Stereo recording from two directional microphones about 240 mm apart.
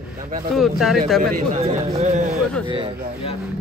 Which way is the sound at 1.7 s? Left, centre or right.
Right.